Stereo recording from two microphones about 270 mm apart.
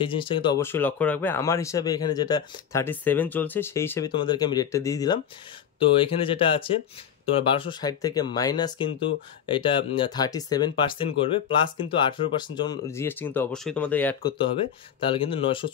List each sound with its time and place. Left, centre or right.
0.0 s speech: centre
15.0 s speech: centre